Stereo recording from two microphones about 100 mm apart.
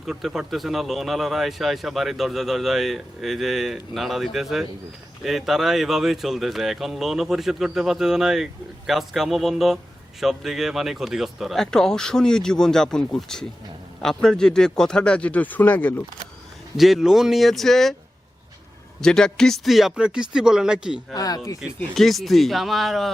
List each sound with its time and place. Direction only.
0.0 s speech: 5° right (ahead or behind); by 16.0 s 15° left (ahead or behind)
16.7 s speech: centre (ahead or behind)
18.9 s speech: 5° left (ahead or behind)
21.1 s speech: 40° left (ahead or behind)
21.9 s speech: centre (ahead or behind)